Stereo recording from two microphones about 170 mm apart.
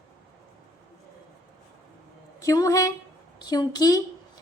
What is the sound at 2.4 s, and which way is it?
A woman's voice, 20° left (ahead or behind).